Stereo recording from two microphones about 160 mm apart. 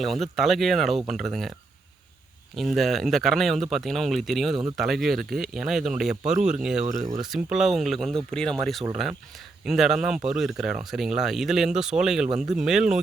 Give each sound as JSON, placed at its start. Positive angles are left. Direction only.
{"t": 0.0, "sound": "speech", "side_deg": 0}
{"t": 2.6, "sound": "speech", "side_deg": 0}